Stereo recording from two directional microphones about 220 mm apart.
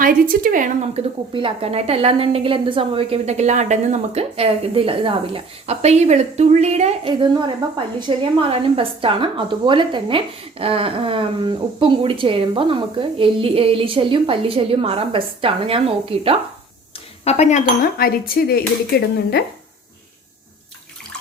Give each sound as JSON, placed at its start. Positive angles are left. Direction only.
{"t": 0.0, "sound": "speech", "side_deg": -40}
{"t": 17.2, "sound": "speech", "side_deg": 30}